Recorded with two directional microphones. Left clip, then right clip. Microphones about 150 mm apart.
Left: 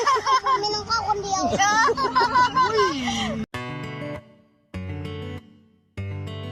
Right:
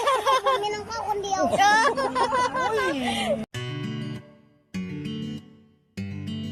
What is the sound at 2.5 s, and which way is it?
Speech, 25° right (ahead or behind).